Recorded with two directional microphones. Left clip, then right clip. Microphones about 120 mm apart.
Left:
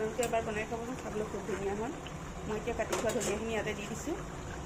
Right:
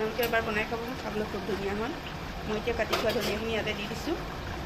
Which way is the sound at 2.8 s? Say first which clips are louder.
Right 4 dB; 5° right (ahead or behind).